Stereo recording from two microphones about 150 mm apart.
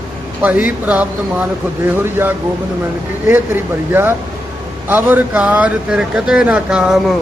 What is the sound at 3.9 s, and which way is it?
Speech, 15° right (ahead or behind).